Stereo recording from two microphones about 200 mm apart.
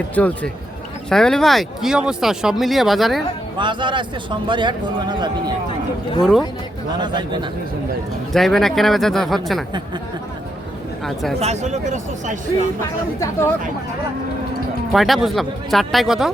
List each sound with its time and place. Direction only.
0.1 s speech: 5° left (ahead or behind)
3.6 s a man's voice: 25° right (ahead or behind)
7.0 s a man's voice: 20° right (ahead or behind)
8.3 s speech: centre (ahead or behind)
11.0 s speech: centre (ahead or behind)
11.3 s speech: 35° right (ahead or behind)
14.9 s speech: centre (ahead or behind)